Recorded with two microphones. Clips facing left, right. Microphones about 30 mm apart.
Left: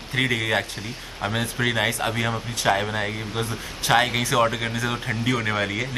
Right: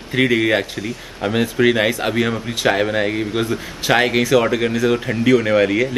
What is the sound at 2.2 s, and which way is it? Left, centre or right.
Speech, right.